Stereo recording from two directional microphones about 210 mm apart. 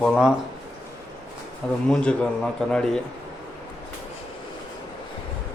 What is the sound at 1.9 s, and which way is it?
A man's voice, 5° left (ahead or behind).